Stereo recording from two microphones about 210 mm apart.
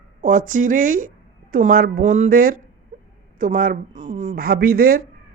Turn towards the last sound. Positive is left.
turn(degrees=-45)  # may be behind; listen again after turning